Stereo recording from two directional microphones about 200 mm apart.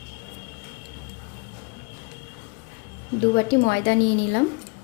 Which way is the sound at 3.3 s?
65° left (ahead or behind).